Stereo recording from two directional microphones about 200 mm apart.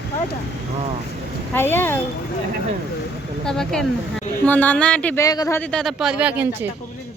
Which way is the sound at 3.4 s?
5° left (ahead or behind).